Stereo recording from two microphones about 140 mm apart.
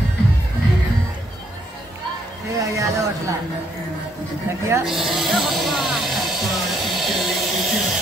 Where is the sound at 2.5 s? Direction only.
20° right (ahead or behind).